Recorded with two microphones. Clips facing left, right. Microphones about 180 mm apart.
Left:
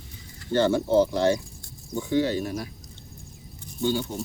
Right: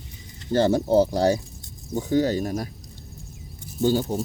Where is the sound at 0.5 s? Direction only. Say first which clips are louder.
Right 2 dB; 40° right (ahead or behind).